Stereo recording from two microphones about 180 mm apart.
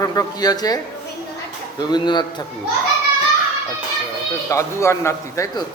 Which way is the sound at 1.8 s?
25° left (ahead or behind).